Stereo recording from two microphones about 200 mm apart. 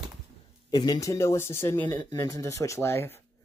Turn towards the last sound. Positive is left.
turn(degrees=10)  # may be behind; listen again after turning